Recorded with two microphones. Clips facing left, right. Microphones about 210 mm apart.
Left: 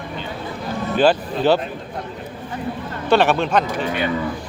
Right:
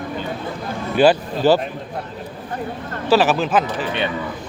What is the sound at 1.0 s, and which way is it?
Speech, 5° right (ahead or behind).